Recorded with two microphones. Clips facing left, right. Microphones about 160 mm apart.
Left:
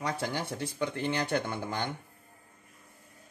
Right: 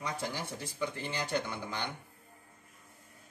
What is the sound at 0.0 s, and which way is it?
Speech, 65° left (ahead or behind).